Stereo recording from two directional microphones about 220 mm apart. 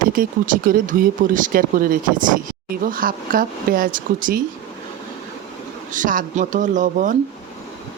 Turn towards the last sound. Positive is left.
turn(degrees=-35)  # may be behind; listen again after turning